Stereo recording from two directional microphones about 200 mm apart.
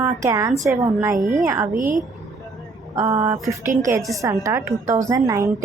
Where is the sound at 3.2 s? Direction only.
15° right (ahead or behind).